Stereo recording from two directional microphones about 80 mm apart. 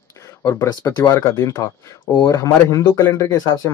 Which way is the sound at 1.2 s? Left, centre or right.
Left.